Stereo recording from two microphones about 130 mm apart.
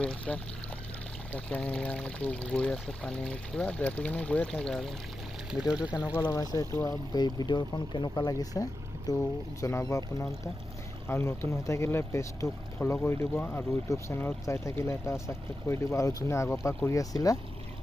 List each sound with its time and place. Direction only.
0.0 s speech: 5° left (ahead or behind)
6.2 s speech: 30° left (ahead or behind)
7.2 s speech: 30° left (ahead or behind)